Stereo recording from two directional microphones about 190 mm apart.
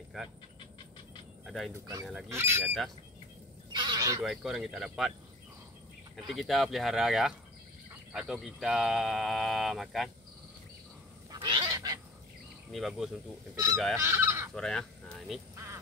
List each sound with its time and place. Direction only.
0.1 s speech: centre (ahead or behind)
1.4 s speech: centre (ahead or behind)
1.7 s speech: 20° right (ahead or behind)
2.6 s speech: 5° left (ahead or behind)
3.7 s a sound: 25° right (ahead or behind)
4.2 s speech: centre (ahead or behind)
6.1 s speech: centre (ahead or behind)
11.3 s goose: 25° right (ahead or behind)
12.7 s speech: centre (ahead or behind)
13.9 s goose: 15° right (ahead or behind)
14.5 s speech: 5° left (ahead or behind)
15.5 s a sound: 15° right (ahead or behind)